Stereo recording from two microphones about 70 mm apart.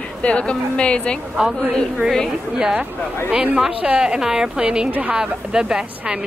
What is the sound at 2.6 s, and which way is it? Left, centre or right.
Speech, centre.